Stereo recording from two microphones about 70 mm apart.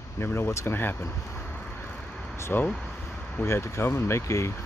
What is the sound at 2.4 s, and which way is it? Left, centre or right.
Speech, left.